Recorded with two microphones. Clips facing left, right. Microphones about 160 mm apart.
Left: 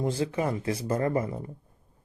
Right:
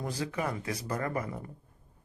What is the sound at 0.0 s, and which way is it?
Speech, 25° left (ahead or behind).